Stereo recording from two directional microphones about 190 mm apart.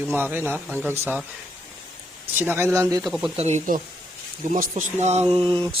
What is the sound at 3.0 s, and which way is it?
Speech, centre (ahead or behind).